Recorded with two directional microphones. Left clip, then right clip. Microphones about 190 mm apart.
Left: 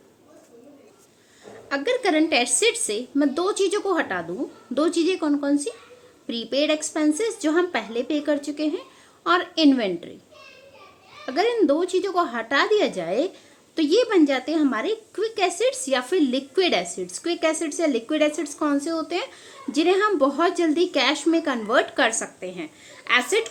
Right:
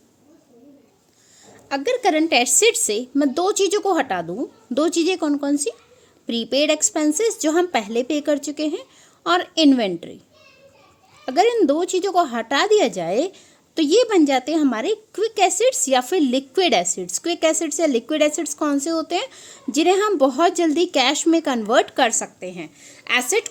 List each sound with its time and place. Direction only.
1.7 s a woman's voice: 45° right (ahead or behind)
11.3 s a woman's voice: 45° right (ahead or behind)